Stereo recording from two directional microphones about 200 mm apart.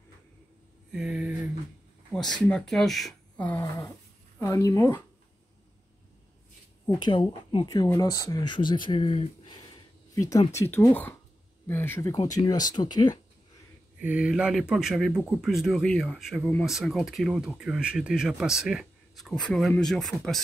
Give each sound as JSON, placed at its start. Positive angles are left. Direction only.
{"t": 0.9, "sound": "speech", "side_deg": -5}
{"t": 2.4, "sound": "speech", "side_deg": 0}
{"t": 6.9, "sound": "speech", "side_deg": 20}
{"t": 10.5, "sound": "speech", "side_deg": 15}
{"t": 13.9, "sound": "speech", "side_deg": -5}